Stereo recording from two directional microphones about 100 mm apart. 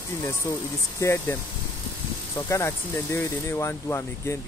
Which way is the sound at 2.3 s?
30° left (ahead or behind).